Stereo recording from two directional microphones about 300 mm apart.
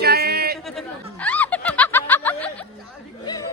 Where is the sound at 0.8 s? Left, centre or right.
Centre.